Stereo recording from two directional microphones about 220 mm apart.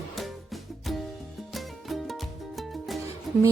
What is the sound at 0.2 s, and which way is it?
Music, centre (ahead or behind).